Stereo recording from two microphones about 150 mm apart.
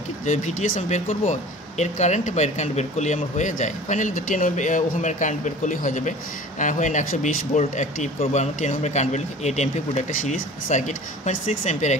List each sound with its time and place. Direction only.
0.2 s speech: 50° left (ahead or behind)